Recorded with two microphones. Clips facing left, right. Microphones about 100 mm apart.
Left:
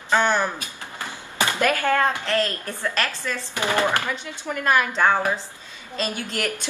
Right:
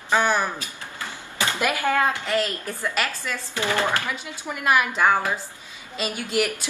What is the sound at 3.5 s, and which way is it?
Speech, 20° left (ahead or behind).